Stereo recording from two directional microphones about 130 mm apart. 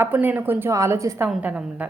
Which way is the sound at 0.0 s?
15° right (ahead or behind).